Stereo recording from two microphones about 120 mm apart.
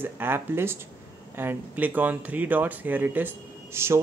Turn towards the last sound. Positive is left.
turn(degrees=-20)  # may be behind; listen again after turning